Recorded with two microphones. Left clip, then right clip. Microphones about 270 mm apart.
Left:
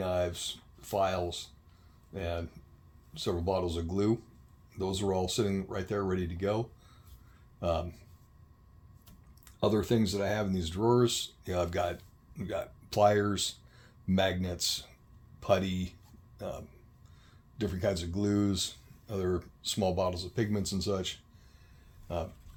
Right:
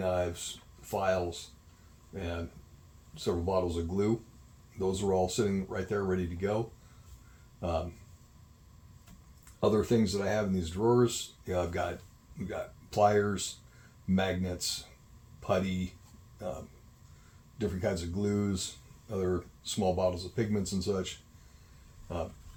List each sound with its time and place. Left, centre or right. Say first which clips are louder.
0.0 s a sound: even; left
0.9 s speech: even; left
3.2 s speech: right 1 dB; left
7.6 s speech: left 3 dB; left
9.6 s speech: right 1 dB; left
17.6 s speech: left 1 dB; left